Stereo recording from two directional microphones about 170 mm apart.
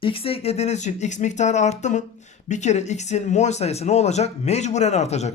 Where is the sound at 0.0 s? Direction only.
35° left (ahead or behind).